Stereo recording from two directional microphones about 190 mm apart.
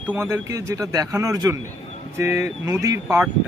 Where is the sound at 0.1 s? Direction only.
15° right (ahead or behind).